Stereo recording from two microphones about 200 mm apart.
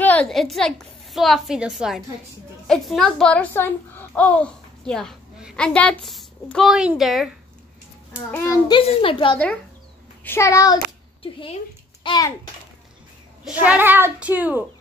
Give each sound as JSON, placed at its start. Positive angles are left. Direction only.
{"t": 0.0, "sound": "a woman's voice", "side_deg": 5}
{"t": 8.6, "sound": "a child's voice", "side_deg": 25}
{"t": 10.2, "sound": "a child's voice", "side_deg": 15}
{"t": 12.0, "sound": "a child's voice", "side_deg": 20}
{"t": 13.6, "sound": "a child's voice", "side_deg": -10}